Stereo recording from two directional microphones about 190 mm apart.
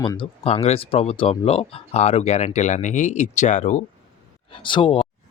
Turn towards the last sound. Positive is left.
turn(degrees=25)  # may be behind; listen again after turning